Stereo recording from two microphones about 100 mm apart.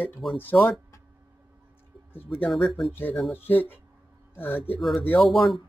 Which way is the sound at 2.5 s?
Centre (ahead or behind).